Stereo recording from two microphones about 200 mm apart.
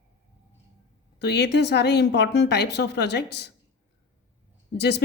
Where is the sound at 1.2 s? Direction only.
55° left (ahead or behind).